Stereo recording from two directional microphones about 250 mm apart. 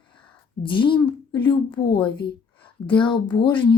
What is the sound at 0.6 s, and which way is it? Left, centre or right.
A woman's voice, centre.